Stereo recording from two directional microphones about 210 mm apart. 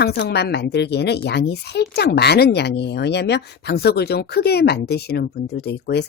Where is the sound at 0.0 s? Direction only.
55° left (ahead or behind).